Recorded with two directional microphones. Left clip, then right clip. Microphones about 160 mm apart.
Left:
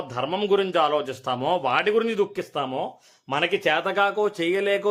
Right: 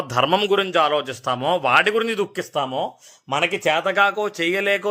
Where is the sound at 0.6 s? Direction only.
20° right (ahead or behind).